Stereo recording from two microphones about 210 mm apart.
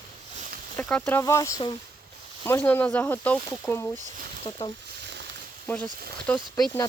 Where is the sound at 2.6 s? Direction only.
5° left (ahead or behind).